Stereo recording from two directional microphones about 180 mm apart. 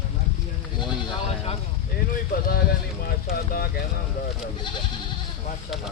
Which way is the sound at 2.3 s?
55° left (ahead or behind).